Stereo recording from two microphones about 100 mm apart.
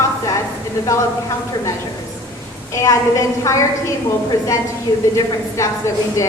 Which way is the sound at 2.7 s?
35° left (ahead or behind).